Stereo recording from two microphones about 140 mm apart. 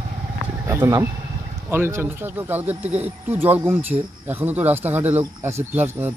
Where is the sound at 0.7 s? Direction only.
20° right (ahead or behind).